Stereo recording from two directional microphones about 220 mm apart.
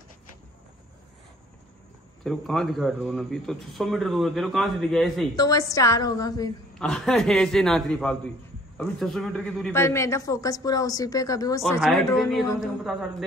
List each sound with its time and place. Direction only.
2.2 s a man's voice: centre (ahead or behind)
5.3 s a man's voice: 15° left (ahead or behind)
6.8 s a man's voice: 5° left (ahead or behind)
11.8 s a man's voice: centre (ahead or behind)